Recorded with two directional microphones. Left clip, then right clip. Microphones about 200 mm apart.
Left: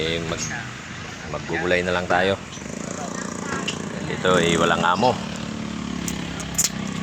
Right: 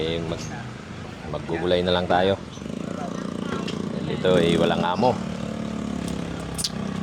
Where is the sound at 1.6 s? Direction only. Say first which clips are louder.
Even; 15° right (ahead or behind).